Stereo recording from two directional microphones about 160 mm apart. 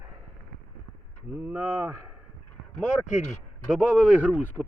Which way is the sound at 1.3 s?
10° right (ahead or behind).